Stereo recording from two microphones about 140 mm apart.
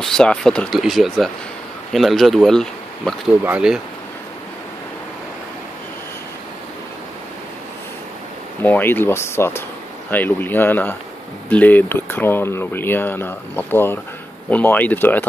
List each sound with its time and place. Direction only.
0.0 s speech: 5° left (ahead or behind)
3.4 s speech: 5° right (ahead or behind)
8.6 s speech: 15° left (ahead or behind)